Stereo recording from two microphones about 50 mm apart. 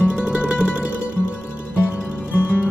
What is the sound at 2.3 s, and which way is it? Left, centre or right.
Music, left.